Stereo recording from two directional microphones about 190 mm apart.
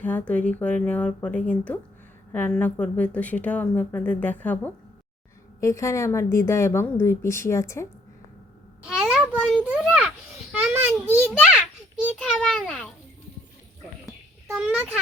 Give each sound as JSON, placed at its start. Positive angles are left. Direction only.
{"t": 0.0, "sound": "a woman's voice", "side_deg": 10}
{"t": 8.8, "sound": "a sound", "side_deg": -5}
{"t": 9.6, "sound": "a child's voice", "side_deg": 0}
{"t": 12.1, "sound": "a child's voice", "side_deg": 5}
{"t": 14.5, "sound": "a child's voice", "side_deg": -5}